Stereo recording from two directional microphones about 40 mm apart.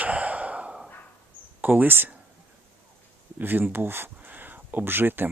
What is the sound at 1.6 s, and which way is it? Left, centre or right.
Speech, right.